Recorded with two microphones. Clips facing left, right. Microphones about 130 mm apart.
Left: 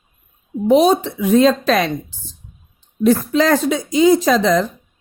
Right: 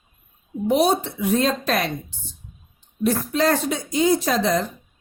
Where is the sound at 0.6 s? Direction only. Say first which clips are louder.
Left 6 dB; 90° left.